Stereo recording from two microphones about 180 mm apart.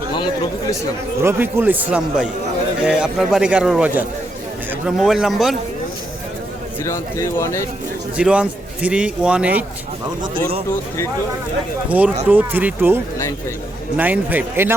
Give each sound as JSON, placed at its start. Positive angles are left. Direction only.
{"t": 1.2, "sound": "a man's voice", "side_deg": -15}
{"t": 6.8, "sound": "speech", "side_deg": 15}
{"t": 8.1, "sound": "a man's voice", "side_deg": -5}
{"t": 11.9, "sound": "a man's voice", "side_deg": -10}